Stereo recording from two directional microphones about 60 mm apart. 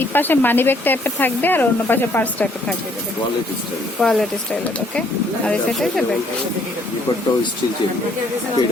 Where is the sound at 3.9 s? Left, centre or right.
Centre.